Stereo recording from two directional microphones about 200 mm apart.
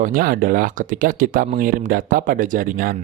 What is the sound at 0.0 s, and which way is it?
Speech, 45° right (ahead or behind).